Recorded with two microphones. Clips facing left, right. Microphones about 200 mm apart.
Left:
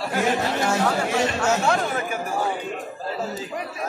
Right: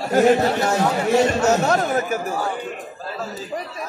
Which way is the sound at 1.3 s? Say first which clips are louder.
Right 4 dB; 40° right (ahead or behind).